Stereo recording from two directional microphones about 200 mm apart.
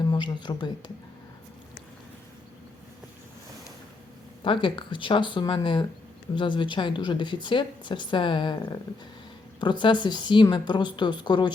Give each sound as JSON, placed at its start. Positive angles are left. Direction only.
{"t": 0.1, "sound": "speech", "side_deg": 20}
{"t": 4.4, "sound": "a woman's voice", "side_deg": 25}